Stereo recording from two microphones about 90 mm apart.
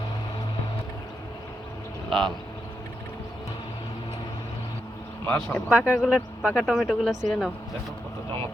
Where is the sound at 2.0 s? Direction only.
65° right (ahead or behind).